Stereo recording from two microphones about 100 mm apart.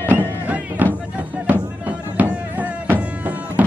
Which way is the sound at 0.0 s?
20° right (ahead or behind).